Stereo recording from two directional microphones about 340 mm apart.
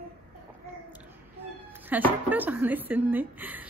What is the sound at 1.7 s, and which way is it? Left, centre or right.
A woman's voice, centre.